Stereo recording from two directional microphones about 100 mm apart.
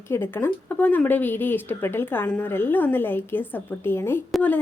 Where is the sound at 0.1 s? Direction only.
25° left (ahead or behind).